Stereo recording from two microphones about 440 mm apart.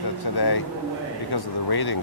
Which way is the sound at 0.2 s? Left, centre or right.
Left.